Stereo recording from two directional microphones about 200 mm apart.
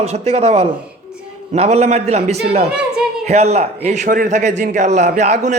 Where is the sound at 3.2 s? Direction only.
35° right (ahead or behind).